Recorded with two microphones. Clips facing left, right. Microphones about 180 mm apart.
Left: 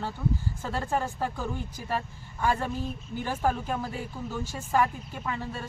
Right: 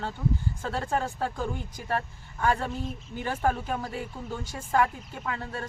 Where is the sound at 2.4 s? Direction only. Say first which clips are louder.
Right 1 dB; 10° left (ahead or behind).